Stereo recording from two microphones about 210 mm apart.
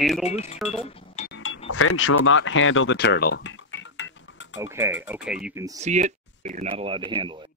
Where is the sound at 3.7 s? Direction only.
65° left (ahead or behind).